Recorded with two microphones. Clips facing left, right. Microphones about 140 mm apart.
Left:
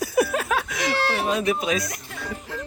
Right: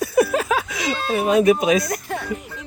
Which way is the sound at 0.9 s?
75° left (ahead or behind).